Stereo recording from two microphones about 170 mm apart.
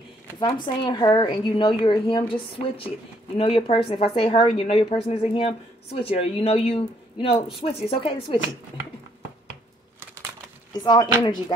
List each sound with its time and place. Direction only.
0.4 s a woman's voice: 25° left (ahead or behind)
10.8 s a woman's voice: 25° left (ahead or behind)